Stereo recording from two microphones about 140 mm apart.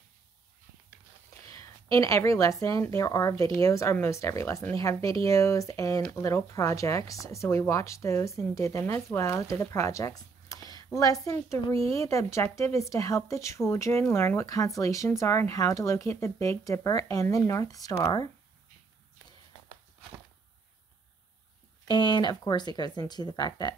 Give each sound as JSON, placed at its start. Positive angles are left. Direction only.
{"t": 1.5, "sound": "speech", "side_deg": 20}
{"t": 21.8, "sound": "speech", "side_deg": 30}